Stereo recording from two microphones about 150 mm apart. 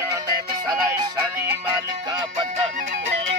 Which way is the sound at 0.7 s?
25° right (ahead or behind).